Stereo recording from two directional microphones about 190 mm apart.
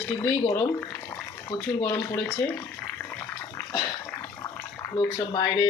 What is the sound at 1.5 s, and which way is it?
Speech, 20° left (ahead or behind).